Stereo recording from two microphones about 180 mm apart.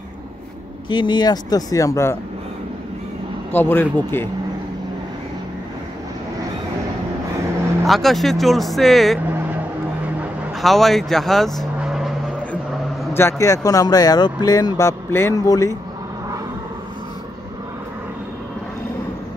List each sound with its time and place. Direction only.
0.8 s speech: 25° left (ahead or behind)
3.5 s speech: 10° left (ahead or behind)
7.8 s speech: centre (ahead or behind)
10.6 s speech: centre (ahead or behind)
13.1 s speech: 15° left (ahead or behind)